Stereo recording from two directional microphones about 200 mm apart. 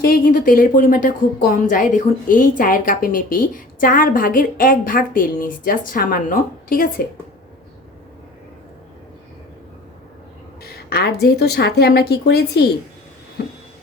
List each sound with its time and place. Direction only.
0.0 s a woman's voice: 45° left (ahead or behind)
10.6 s a woman's voice: 50° left (ahead or behind)